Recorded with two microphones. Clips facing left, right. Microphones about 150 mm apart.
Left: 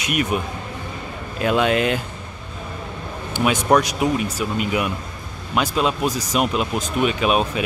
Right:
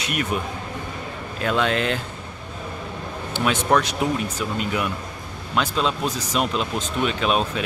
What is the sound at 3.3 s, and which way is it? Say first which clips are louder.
Speech: left 3 dB; 15° left (ahead or behind).